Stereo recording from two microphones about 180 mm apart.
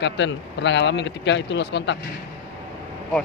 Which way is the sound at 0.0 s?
85° left.